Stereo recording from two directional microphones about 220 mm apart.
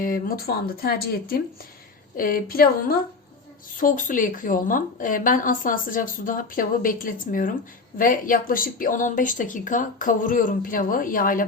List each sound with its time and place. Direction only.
0.0 s a woman's voice: 40° left (ahead or behind)